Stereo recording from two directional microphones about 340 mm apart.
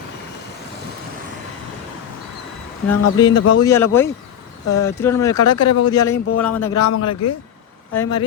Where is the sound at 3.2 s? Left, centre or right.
Centre.